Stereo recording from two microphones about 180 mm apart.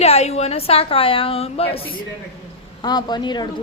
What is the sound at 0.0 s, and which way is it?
A woman's voice, 35° left (ahead or behind).